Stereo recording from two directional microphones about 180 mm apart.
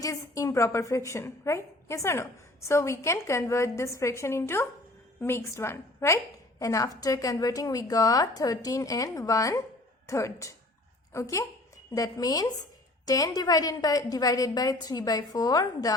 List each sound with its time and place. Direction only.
0.0 s a woman's voice: 15° left (ahead or behind)